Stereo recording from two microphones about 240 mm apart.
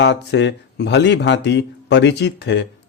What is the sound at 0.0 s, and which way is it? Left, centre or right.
Speech, left.